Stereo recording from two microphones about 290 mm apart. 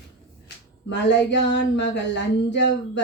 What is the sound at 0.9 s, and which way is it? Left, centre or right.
Speech, left.